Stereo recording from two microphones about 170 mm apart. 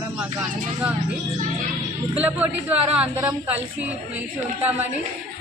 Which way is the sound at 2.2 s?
10° right (ahead or behind).